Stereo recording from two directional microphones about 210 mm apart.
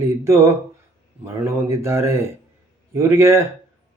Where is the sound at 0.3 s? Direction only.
15° right (ahead or behind).